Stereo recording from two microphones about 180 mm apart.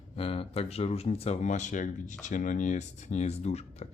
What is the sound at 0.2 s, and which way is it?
Speech, 35° left (ahead or behind).